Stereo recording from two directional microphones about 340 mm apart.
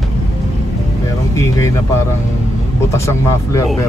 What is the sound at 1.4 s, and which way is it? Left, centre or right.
Speech, centre.